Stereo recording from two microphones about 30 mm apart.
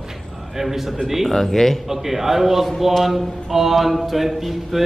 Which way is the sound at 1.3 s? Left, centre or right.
Centre.